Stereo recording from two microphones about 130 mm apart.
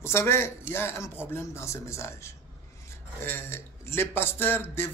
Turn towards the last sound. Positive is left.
turn(degrees=15)  # may be behind; listen again after turning